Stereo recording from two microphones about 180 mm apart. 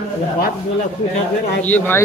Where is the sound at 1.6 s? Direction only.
10° left (ahead or behind).